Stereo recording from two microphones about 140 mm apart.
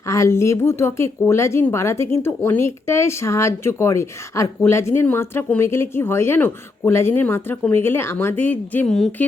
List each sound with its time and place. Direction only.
0.1 s a woman's voice: 20° left (ahead or behind)